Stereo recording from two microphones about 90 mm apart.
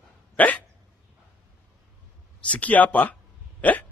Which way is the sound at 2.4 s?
15° left (ahead or behind).